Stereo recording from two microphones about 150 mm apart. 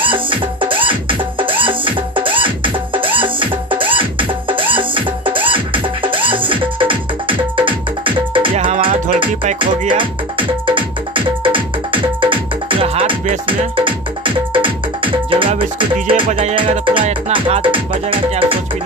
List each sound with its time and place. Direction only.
0.0 s music: 35° right (ahead or behind)